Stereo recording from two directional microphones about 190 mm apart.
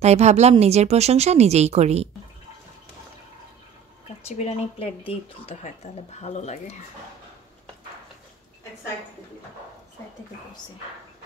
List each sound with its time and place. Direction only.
0.0 s speech: 35° right (ahead or behind)
4.3 s speech: 30° left (ahead or behind)